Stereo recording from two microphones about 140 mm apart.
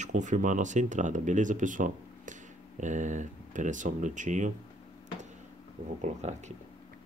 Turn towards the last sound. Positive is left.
turn(degrees=-55)  # may be behind; listen again after turning